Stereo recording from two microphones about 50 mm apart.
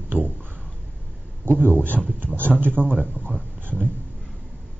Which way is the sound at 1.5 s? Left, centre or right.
Right.